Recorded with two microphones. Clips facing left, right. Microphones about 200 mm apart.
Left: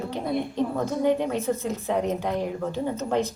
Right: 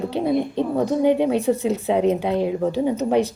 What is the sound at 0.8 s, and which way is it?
A woman's voice, 20° right (ahead or behind).